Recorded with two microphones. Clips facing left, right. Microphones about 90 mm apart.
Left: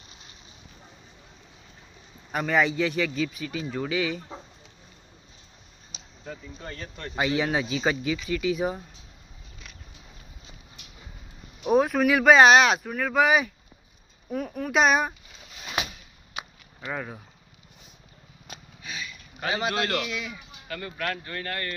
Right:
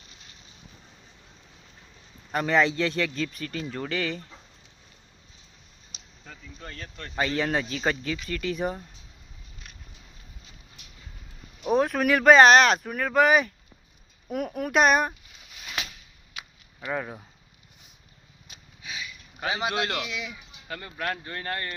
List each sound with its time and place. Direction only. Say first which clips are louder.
0.1 s boat: left 2 dB; 20° left (ahead or behind)
2.3 s speech: right 1 dB; 5° left (ahead or behind)
6.2 s speech: left 5 dB; 10° left (ahead or behind)
11.6 s speech: left 2 dB; 5° left (ahead or behind)
14.3 s speech: right 1 dB; 10° right (ahead or behind)
15.8 s a sound: left 5 dB; 20° left (ahead or behind)
16.9 s speech: right 3 dB; 5° right (ahead or behind)
18.8 s speech: even; 15° right (ahead or behind)